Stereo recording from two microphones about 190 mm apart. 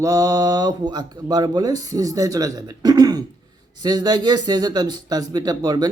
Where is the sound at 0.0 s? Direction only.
20° right (ahead or behind).